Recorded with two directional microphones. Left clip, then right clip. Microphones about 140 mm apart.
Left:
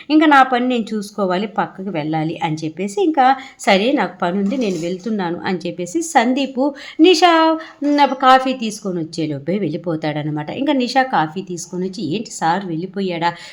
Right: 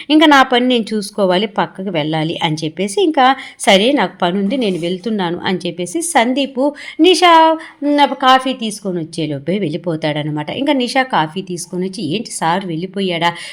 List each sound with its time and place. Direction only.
0.1 s a woman's voice: 20° right (ahead or behind)